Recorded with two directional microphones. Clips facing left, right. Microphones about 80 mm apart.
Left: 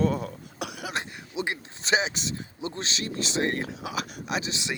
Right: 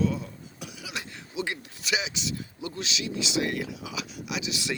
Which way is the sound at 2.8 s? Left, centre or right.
Left.